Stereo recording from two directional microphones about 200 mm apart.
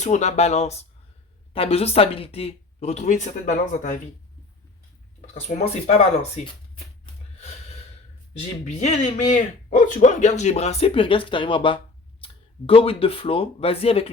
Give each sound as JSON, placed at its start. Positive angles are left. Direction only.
{"t": 0.0, "sound": "speech", "side_deg": 35}
{"t": 5.2, "sound": "speech", "side_deg": 35}
{"t": 8.3, "sound": "speech", "side_deg": 35}